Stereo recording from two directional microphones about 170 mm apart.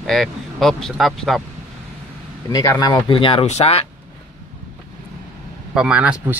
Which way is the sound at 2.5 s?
20° left (ahead or behind).